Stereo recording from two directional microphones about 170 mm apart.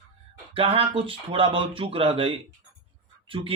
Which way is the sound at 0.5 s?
35° right (ahead or behind).